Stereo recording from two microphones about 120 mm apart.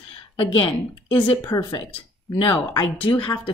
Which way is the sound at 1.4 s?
30° left (ahead or behind).